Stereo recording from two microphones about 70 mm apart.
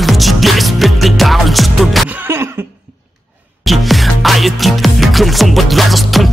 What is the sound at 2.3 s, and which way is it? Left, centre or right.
Cough, right.